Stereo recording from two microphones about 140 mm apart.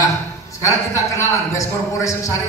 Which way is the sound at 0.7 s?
20° left (ahead or behind).